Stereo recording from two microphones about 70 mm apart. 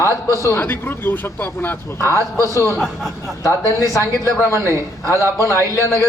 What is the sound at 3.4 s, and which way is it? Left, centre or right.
Speech, left.